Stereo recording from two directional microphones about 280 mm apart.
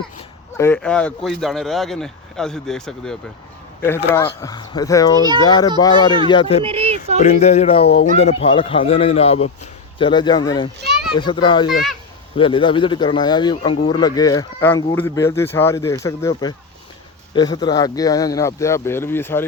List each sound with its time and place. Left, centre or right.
0.5 s speech: centre
6.6 s speech: centre
7.2 s speech: left; by 19.5 s centre